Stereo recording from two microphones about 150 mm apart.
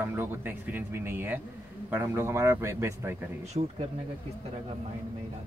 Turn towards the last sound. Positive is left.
turn(degrees=-45)  # may be behind; listen again after turning